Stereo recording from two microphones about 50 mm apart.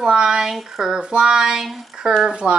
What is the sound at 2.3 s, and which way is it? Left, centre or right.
Speech, right.